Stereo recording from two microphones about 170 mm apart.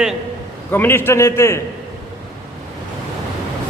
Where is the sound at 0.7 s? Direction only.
10° left (ahead or behind).